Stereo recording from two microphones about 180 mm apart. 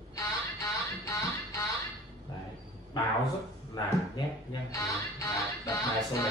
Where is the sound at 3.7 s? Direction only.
20° left (ahead or behind).